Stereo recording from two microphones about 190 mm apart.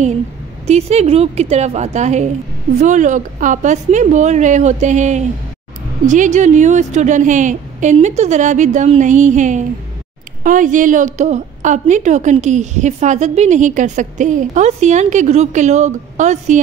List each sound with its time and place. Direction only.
0.7 s a woman's voice: 35° right (ahead or behind)